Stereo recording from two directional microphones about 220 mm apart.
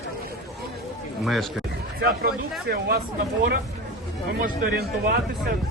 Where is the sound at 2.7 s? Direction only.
45° right (ahead or behind).